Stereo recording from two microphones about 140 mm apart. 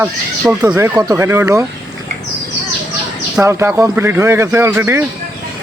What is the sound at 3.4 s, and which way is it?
Speech, 20° right (ahead or behind).